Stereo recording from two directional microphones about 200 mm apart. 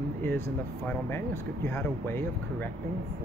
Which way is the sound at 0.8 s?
10° left (ahead or behind).